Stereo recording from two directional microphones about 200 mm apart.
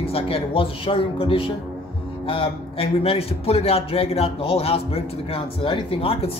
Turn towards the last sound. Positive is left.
turn(degrees=30)  # may be behind; listen again after turning